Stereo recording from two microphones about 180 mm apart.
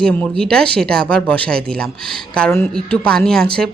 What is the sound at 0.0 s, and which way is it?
Speech, 5° left (ahead or behind).